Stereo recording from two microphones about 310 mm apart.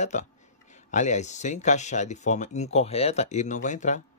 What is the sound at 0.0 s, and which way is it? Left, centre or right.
Speech, left.